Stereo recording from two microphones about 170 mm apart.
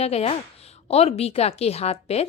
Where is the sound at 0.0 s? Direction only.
40° left (ahead or behind).